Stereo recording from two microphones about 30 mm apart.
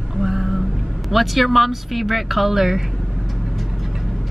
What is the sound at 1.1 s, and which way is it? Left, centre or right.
Speech, centre.